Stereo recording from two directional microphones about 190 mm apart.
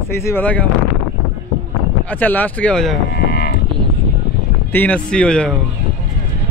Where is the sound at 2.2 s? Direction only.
10° left (ahead or behind).